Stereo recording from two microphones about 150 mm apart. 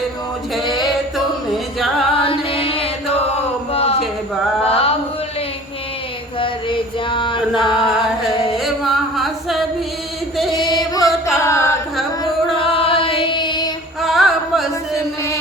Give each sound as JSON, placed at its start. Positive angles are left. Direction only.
{"t": 2.1, "sound": "carnatic music", "side_deg": 40}
{"t": 3.7, "sound": "a sound", "side_deg": 40}
{"t": 4.6, "sound": "carnatic music", "side_deg": 40}
{"t": 6.4, "sound": "chant", "side_deg": 35}
{"t": 8.5, "sound": "music", "side_deg": 0}
{"t": 10.6, "sound": "music", "side_deg": 25}
{"t": 11.0, "sound": "carnatic music", "side_deg": 0}
{"t": 11.3, "sound": "chant", "side_deg": 20}
{"t": 12.5, "sound": "music", "side_deg": 40}
{"t": 14.0, "sound": "music", "side_deg": 0}
{"t": 14.9, "sound": "music", "side_deg": 20}